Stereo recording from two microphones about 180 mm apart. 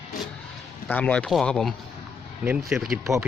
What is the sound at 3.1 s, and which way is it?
Speech, 15° right (ahead or behind).